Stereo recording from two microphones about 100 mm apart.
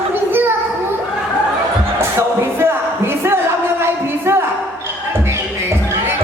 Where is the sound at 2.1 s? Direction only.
25° right (ahead or behind).